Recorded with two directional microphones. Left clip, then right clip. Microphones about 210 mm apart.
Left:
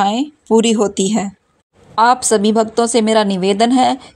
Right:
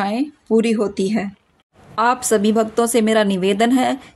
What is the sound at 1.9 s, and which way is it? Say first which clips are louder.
A woman's voice: left 5 dB; 15° left (ahead or behind).